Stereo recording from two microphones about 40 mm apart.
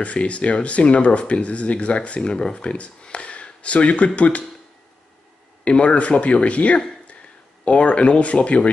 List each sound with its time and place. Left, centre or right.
0.0 s speech: left
5.6 s speech: left